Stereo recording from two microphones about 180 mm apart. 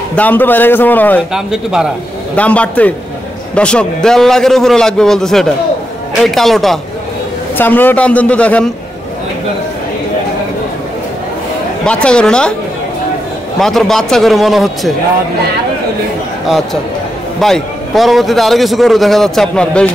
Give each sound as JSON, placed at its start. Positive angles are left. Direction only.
{"t": 0.1, "sound": "a man's voice", "side_deg": 10}
{"t": 1.3, "sound": "a man's voice", "side_deg": -5}
{"t": 2.3, "sound": "a man's voice", "side_deg": 5}
{"t": 11.8, "sound": "a man's voice", "side_deg": 5}
{"t": 13.6, "sound": "a man's voice", "side_deg": 0}
{"t": 17.4, "sound": "a man's voice", "side_deg": 0}